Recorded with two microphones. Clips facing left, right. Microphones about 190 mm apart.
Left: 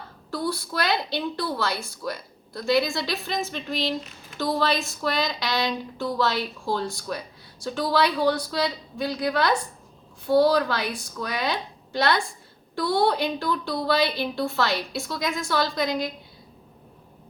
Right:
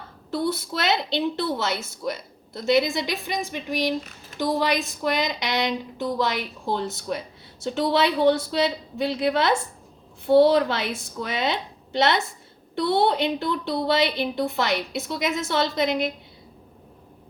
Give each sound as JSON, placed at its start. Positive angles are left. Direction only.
{"t": 0.3, "sound": "a woman's voice", "side_deg": -25}